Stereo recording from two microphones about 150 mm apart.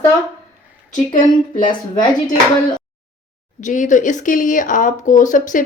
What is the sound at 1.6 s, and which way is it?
Speech, 30° left (ahead or behind).